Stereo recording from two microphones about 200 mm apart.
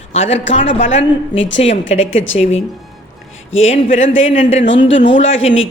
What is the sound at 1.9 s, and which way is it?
Speech, 35° left (ahead or behind).